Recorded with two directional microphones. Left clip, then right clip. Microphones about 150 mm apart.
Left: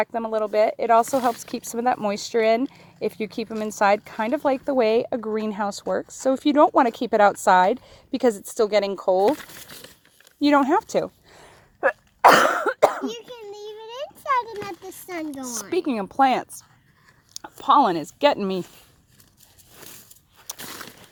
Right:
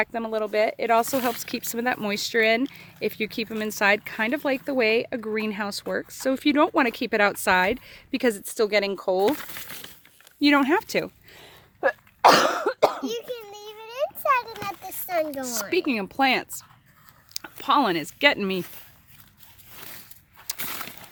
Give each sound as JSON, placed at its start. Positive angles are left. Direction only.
{"t": 0.0, "sound": "speech", "side_deg": 0}
{"t": 1.1, "sound": "speech", "side_deg": -10}
{"t": 1.5, "sound": "speech", "side_deg": 5}
{"t": 10.7, "sound": "a sound", "side_deg": 5}
{"t": 11.9, "sound": "cough", "side_deg": 30}
{"t": 15.3, "sound": "speech", "side_deg": 10}